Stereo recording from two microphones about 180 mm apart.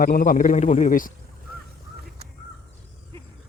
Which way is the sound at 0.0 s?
50° left (ahead or behind).